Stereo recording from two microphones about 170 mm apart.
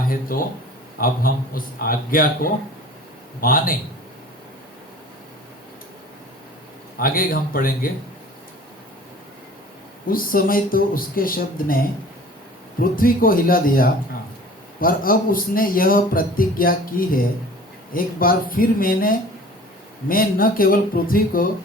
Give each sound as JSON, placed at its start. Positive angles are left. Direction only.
{"t": 0.3, "sound": "speech", "side_deg": 55}
{"t": 6.9, "sound": "speech", "side_deg": 55}
{"t": 10.1, "sound": "speech", "side_deg": 55}
{"t": 12.8, "sound": "speech", "side_deg": 55}